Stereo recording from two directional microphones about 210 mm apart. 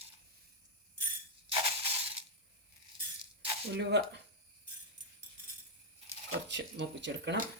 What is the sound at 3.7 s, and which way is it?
Speech, 55° right (ahead or behind).